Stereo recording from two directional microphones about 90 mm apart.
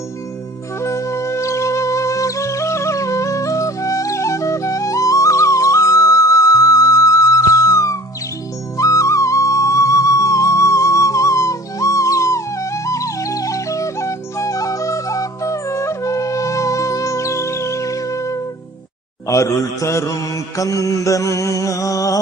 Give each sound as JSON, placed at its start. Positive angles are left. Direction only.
{"t": 0.8, "sound": "music", "side_deg": 35}
{"t": 19.3, "sound": "mantra", "side_deg": 35}